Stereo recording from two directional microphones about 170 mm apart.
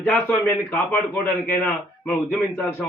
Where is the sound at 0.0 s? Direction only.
10° left (ahead or behind).